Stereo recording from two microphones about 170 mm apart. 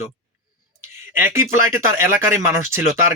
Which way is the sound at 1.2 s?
15° right (ahead or behind).